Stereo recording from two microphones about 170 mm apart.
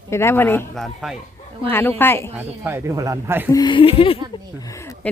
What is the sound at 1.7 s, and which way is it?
Speech, 10° left (ahead or behind).